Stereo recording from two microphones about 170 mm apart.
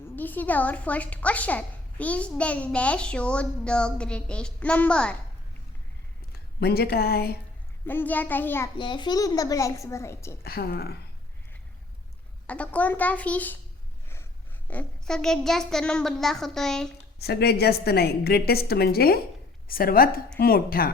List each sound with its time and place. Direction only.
0.2 s a woman's voice: 10° left (ahead or behind)
6.6 s a woman's voice: 70° left (ahead or behind)
7.9 s a woman's voice: 10° left (ahead or behind)
8.8 s a child's voice: 25° left (ahead or behind)
10.4 s a woman's voice: 65° left (ahead or behind)
12.5 s a woman's voice: 10° left (ahead or behind)
14.7 s speech: 5° left (ahead or behind)
17.2 s a woman's voice: 70° left (ahead or behind)